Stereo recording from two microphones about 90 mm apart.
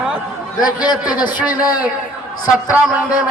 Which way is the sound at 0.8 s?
55° left (ahead or behind).